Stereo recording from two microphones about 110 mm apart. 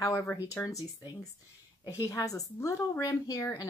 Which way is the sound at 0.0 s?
30° left (ahead or behind).